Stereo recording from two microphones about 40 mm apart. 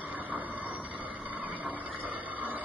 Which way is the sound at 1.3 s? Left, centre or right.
Right.